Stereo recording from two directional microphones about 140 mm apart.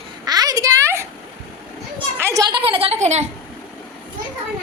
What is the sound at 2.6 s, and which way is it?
Speech, 40° right (ahead or behind).